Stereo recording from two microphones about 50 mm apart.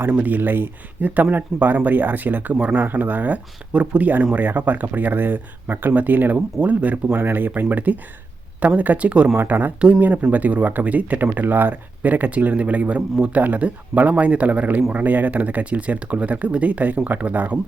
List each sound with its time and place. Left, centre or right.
0.1 s speech: right
7.2 s speech: right
9.5 s speech: right